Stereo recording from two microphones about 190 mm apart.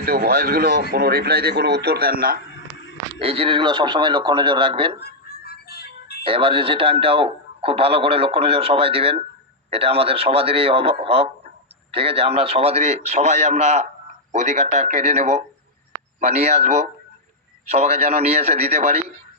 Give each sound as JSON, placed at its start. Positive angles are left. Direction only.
{"t": 0.0, "sound": "speech", "side_deg": -55}
{"t": 3.2, "sound": "speech", "side_deg": -30}
{"t": 4.9, "sound": "music", "side_deg": 55}
{"t": 6.2, "sound": "a man's voice", "side_deg": -30}